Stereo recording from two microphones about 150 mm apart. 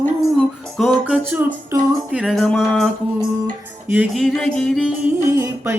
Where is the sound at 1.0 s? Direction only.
10° right (ahead or behind).